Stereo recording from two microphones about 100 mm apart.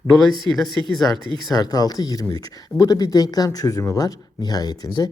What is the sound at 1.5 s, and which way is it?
Speech, 40° left (ahead or behind).